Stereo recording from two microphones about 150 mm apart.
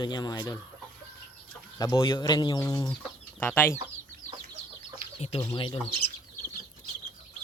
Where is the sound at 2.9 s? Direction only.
10° left (ahead or behind).